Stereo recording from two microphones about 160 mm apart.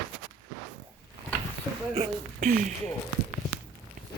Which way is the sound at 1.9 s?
55° right (ahead or behind).